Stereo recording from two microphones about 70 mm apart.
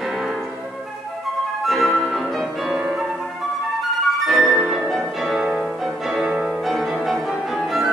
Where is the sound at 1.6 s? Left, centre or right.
Centre.